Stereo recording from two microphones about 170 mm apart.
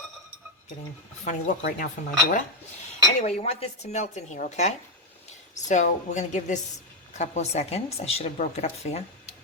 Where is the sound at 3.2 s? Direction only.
40° left (ahead or behind).